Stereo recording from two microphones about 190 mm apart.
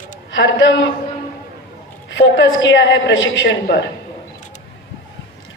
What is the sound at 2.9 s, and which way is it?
Speech, 80° left.